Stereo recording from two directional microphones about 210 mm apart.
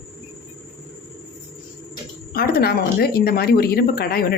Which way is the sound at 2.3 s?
45° left (ahead or behind).